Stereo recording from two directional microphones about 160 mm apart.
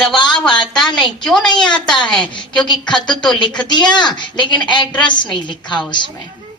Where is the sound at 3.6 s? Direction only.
30° left (ahead or behind).